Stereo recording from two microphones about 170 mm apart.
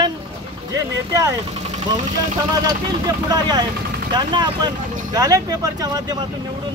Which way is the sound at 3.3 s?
25° right (ahead or behind).